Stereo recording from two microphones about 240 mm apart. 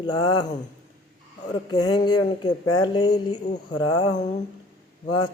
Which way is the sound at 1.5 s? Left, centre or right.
Centre.